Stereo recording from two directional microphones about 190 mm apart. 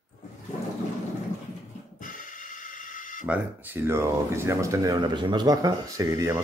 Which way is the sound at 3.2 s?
10° right (ahead or behind).